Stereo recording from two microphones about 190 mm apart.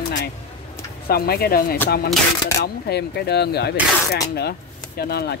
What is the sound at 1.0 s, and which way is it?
Speech, 55° left (ahead or behind).